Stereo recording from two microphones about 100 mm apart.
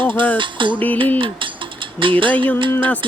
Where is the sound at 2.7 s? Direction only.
25° left (ahead or behind).